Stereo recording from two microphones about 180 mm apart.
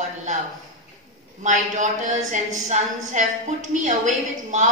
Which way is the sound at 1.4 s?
45° right (ahead or behind).